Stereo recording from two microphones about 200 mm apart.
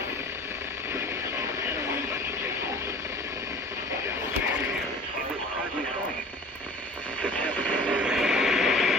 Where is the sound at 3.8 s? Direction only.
15° right (ahead or behind).